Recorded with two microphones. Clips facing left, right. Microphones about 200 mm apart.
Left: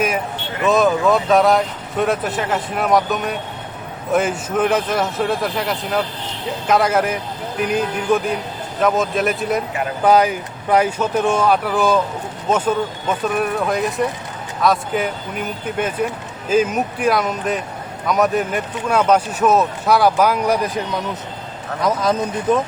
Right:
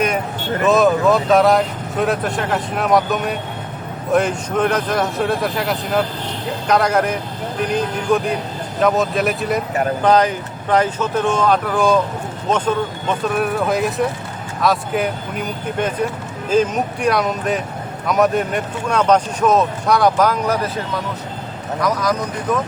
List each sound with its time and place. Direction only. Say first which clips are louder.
0.6 s speech: right 1 dB; centre (ahead or behind)
21.8 s speech: left 1 dB; 25° left (ahead or behind)